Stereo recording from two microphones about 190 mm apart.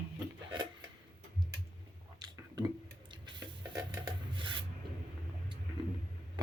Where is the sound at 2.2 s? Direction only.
20° right (ahead or behind).